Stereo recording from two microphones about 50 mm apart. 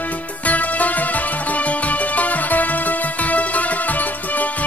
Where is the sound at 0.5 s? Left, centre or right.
Left.